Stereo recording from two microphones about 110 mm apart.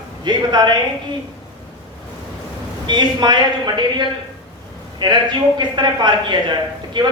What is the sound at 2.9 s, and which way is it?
Speech, 40° right (ahead or behind).